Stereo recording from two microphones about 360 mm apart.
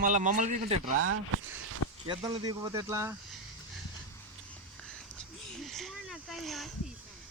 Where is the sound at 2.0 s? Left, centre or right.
Centre.